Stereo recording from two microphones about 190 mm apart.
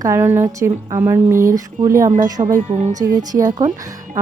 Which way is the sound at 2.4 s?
40° right (ahead or behind).